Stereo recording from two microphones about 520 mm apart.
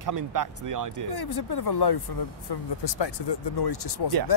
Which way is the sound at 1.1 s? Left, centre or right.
Left.